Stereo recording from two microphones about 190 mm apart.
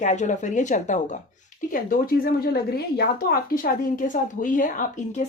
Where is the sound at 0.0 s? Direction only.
40° left (ahead or behind).